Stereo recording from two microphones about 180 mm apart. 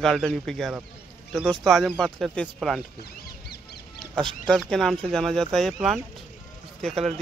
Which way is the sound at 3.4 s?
65° left (ahead or behind).